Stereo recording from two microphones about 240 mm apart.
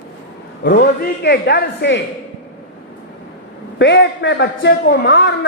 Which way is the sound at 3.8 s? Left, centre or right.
Left.